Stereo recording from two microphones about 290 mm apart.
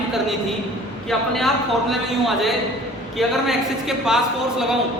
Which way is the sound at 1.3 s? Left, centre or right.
Centre.